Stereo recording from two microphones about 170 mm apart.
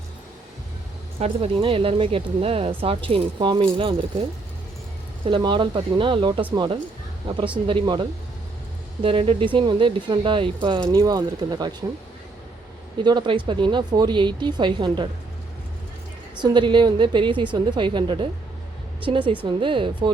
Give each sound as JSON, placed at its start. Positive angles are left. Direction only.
{"t": 1.2, "sound": "speech", "side_deg": -35}
{"t": 5.2, "sound": "speech", "side_deg": -30}
{"t": 9.0, "sound": "speech", "side_deg": -30}
{"t": 13.0, "sound": "speech", "side_deg": -25}
{"t": 16.4, "sound": "speech", "side_deg": -25}